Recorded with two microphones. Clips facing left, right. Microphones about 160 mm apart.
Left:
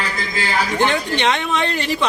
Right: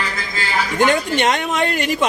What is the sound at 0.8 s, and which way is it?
A woman's voice, 45° right (ahead or behind).